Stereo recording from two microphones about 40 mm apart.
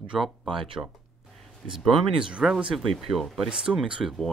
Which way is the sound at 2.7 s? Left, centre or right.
Centre.